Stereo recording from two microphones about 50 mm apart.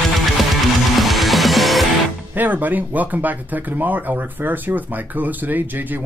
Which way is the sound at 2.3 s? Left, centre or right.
Right.